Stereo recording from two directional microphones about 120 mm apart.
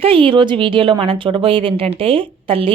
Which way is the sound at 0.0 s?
50° right (ahead or behind).